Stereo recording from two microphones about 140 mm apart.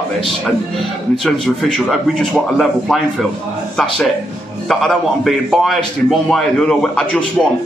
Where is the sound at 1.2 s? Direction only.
Centre (ahead or behind).